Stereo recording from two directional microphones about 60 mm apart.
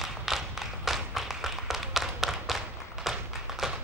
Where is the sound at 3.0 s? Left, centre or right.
Centre.